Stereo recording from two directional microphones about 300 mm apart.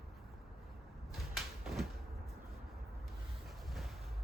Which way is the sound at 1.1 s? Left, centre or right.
Centre.